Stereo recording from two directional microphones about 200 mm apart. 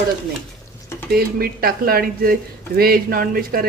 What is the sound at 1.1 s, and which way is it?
Speech, 50° right (ahead or behind).